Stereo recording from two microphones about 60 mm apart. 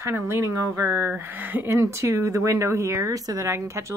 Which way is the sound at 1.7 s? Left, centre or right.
Right.